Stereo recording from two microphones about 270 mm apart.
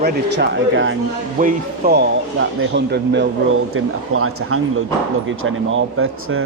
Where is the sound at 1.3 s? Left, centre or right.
Right.